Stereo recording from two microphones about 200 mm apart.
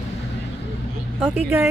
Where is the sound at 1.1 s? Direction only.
5° right (ahead or behind).